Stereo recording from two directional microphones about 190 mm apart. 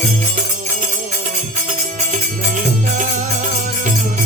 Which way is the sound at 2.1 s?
40° right (ahead or behind).